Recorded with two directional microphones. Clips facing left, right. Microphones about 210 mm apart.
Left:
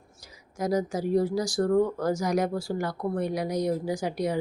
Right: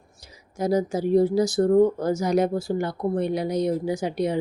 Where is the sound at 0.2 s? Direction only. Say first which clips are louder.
Right 4 dB; 30° right (ahead or behind).